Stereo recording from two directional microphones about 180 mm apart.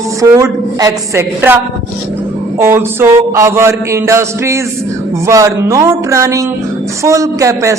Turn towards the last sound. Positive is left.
turn(degrees=-15)  # may be behind; listen again after turning